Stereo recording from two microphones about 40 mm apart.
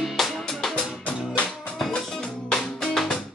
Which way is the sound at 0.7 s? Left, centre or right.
Left.